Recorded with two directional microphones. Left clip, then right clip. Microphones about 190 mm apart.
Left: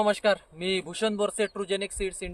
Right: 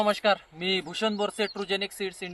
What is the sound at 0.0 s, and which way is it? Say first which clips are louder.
Speech: even; 40° left (ahead or behind).